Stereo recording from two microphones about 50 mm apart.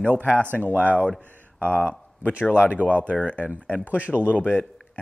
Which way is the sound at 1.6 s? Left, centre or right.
Left.